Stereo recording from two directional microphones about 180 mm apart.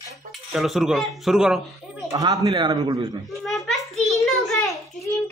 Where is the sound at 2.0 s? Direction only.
20° right (ahead or behind).